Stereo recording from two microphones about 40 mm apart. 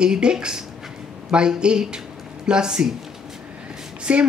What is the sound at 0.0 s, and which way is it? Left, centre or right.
Speech, right.